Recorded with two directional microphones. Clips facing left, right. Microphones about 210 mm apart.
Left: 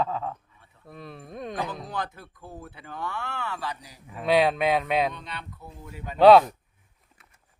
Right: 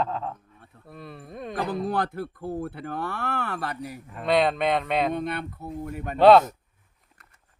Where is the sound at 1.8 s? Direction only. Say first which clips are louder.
Right 7 dB; 55° right (ahead or behind).